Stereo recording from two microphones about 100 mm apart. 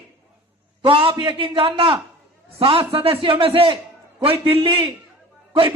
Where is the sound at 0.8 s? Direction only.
60° right (ahead or behind).